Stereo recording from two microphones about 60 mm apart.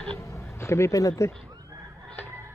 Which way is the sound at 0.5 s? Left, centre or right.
Left.